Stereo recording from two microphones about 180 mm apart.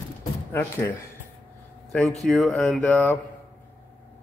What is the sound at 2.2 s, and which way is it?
A man's voice, centre (ahead or behind).